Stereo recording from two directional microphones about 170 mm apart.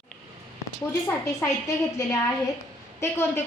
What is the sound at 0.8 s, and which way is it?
Speech, 10° left (ahead or behind).